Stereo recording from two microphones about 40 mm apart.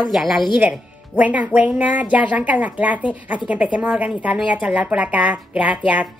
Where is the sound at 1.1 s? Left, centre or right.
Right.